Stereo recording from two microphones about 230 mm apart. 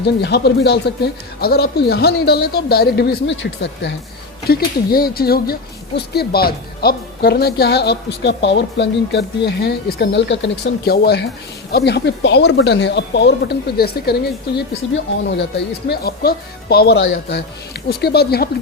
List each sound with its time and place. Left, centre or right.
0.0 s speech: left